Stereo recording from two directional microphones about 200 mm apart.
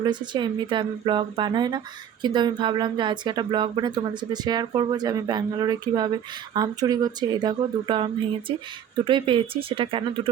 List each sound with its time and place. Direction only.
0.0 s speech: 20° right (ahead or behind)